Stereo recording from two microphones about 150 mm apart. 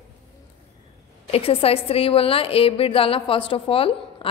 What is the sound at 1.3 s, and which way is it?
A woman's voice, 40° left (ahead or behind).